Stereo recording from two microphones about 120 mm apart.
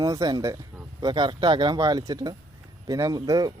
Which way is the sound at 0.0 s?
30° right (ahead or behind).